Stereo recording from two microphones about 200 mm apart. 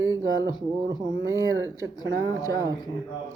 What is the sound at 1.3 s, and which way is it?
Speech, 15° right (ahead or behind).